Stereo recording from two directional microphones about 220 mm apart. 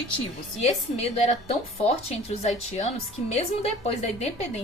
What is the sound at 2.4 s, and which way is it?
A woman's voice, 30° left (ahead or behind).